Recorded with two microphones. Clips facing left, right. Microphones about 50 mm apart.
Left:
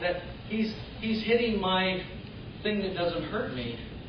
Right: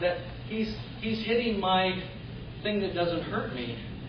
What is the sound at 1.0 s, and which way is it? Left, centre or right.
Speech, centre.